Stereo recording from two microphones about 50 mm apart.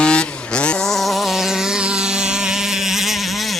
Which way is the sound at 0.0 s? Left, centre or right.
Centre.